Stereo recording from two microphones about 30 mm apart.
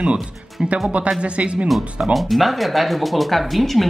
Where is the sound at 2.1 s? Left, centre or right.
Centre.